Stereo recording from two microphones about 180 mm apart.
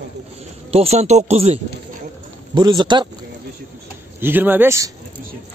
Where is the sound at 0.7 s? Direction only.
35° right (ahead or behind).